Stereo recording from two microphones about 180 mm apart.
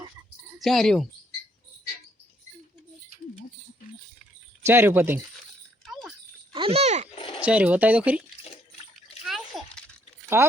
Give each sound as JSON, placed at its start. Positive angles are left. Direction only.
{"t": 0.6, "sound": "speech", "side_deg": 0}
{"t": 4.6, "sound": "speech", "side_deg": -15}
{"t": 5.8, "sound": "a sound", "side_deg": 0}
{"t": 6.5, "sound": "speech", "side_deg": -30}
{"t": 7.2, "sound": "a sound", "side_deg": 30}
{"t": 7.4, "sound": "speech", "side_deg": -5}
{"t": 9.2, "sound": "splash", "side_deg": 0}
{"t": 10.3, "sound": "speech", "side_deg": -10}